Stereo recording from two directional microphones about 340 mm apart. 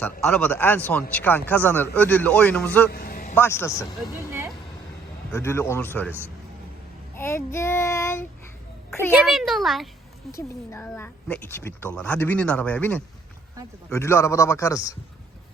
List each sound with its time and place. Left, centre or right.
0.0 s a woman's voice: centre
2.9 s a sound: left
3.3 s child singing: centre
4.3 s vehicle: centre
5.3 s child singing: centre
7.2 s child singing: centre
8.9 s a child's voice: centre
13.9 s child singing: centre